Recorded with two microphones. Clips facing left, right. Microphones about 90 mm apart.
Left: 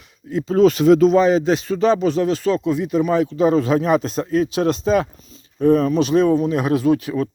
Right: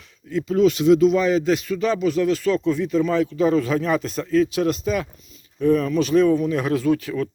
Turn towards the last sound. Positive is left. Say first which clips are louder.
# left 3 dB
turn(degrees=25)  # may be behind; listen again after turning